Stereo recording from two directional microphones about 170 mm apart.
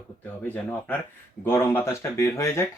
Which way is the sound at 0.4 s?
10° left (ahead or behind).